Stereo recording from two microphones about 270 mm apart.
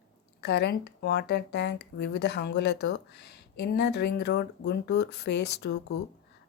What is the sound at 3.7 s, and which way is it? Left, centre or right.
A woman's voice, left.